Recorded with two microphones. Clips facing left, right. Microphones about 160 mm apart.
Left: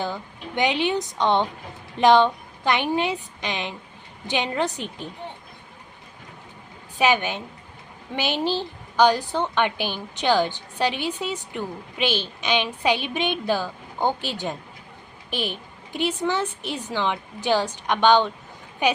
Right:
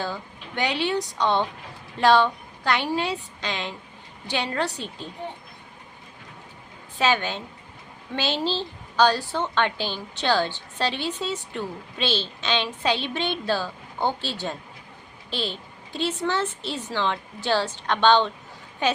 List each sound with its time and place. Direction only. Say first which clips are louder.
0.0 s a woman's voice: left 2 dB; 20° left (ahead or behind)
7.0 s a woman's voice: left 2 dB; 15° left (ahead or behind)